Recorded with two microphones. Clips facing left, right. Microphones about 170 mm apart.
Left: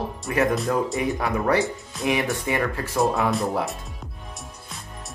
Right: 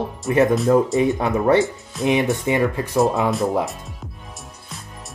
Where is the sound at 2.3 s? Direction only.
20° right (ahead or behind).